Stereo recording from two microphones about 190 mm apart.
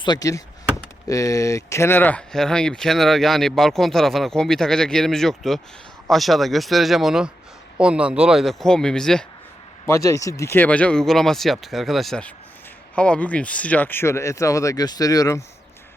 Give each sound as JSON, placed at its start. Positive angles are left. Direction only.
{"t": 0.0, "sound": "a sound", "side_deg": 20}
{"t": 1.0, "sound": "speech", "side_deg": 15}
{"t": 9.8, "sound": "speech", "side_deg": 15}